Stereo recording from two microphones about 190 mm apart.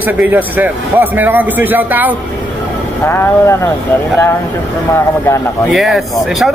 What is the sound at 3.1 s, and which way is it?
Speech, 10° left (ahead or behind).